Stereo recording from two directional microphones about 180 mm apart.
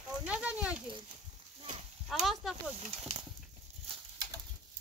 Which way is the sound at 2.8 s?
35° right (ahead or behind).